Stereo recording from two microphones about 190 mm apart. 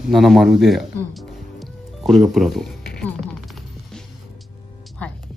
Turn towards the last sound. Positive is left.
turn(degrees=0)  # may be behind; listen again after turning